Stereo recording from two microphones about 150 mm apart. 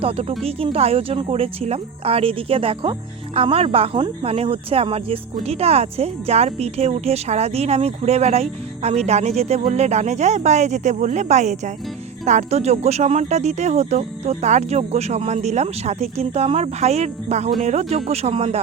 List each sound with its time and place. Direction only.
0.0 s speech: 40° right (ahead or behind)